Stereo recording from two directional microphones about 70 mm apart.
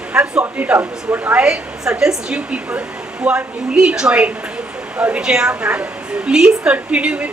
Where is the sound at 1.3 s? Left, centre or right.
Centre.